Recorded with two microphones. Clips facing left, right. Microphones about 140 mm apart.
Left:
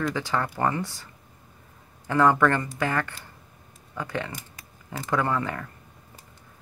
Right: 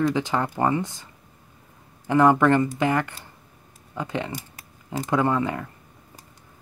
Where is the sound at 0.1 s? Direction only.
20° right (ahead or behind).